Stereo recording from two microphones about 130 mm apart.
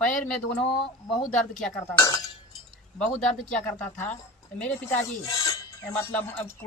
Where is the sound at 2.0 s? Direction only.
30° left (ahead or behind).